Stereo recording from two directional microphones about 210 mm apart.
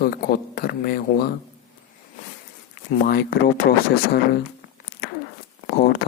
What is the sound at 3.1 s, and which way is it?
Speech, 50° left (ahead or behind).